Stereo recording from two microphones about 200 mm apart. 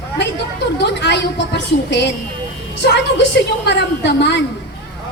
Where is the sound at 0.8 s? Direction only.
60° left (ahead or behind).